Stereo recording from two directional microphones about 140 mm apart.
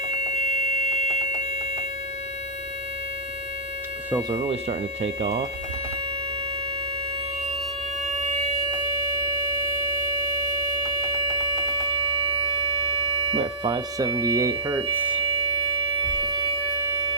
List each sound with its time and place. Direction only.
0.8 s smoke detector: 55° left (ahead or behind)
4.3 s speech: 45° right (ahead or behind)
13.3 s speech: 45° right (ahead or behind)
13.7 s speech: 25° right (ahead or behind)
16.0 s siren: 35° right (ahead or behind)